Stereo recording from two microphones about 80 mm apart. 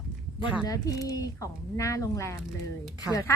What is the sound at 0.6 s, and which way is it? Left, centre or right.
A woman's voice, left.